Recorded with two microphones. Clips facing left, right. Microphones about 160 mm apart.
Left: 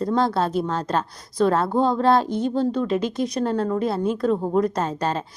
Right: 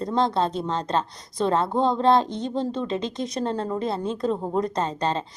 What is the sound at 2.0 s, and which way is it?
Speech, 25° right (ahead or behind).